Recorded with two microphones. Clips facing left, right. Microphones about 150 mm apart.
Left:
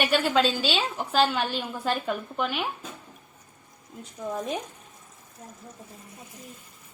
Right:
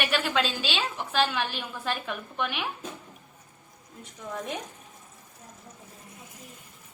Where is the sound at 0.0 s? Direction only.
35° left (ahead or behind).